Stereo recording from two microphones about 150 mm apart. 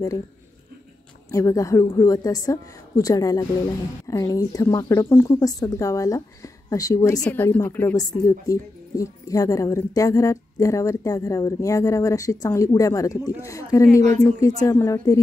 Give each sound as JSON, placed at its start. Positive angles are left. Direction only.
{"t": 1.3, "sound": "a woman's voice", "side_deg": 20}
{"t": 7.2, "sound": "a woman's voice", "side_deg": 10}